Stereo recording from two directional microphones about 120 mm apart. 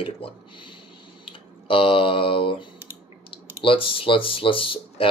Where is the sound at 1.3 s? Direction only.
50° left (ahead or behind).